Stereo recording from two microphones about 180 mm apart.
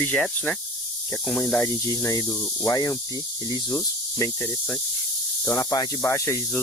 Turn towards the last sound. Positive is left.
turn(degrees=15)  # may be behind; listen again after turning